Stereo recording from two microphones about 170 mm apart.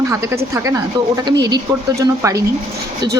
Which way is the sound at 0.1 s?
15° right (ahead or behind).